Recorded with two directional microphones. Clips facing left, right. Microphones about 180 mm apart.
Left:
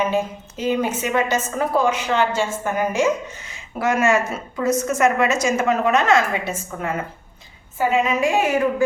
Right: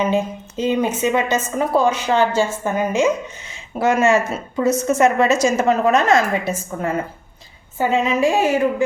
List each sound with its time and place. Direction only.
0.0 s a woman's voice: 20° right (ahead or behind)